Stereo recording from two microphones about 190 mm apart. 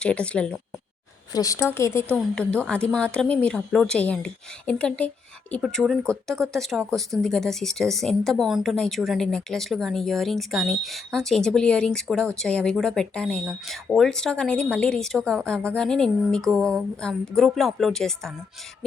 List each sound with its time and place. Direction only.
0.0 s speech: 5° left (ahead or behind)
1.3 s a woman's voice: 20° left (ahead or behind); by 18.3 s 5° left (ahead or behind)